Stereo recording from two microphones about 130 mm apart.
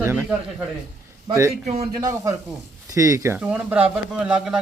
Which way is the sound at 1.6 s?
55° right (ahead or behind).